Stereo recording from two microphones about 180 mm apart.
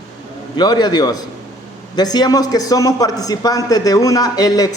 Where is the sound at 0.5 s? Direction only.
25° left (ahead or behind).